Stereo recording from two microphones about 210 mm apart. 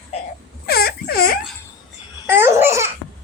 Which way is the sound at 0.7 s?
45° left (ahead or behind).